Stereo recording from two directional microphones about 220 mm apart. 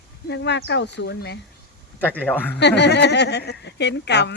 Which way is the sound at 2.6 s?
50° left (ahead or behind).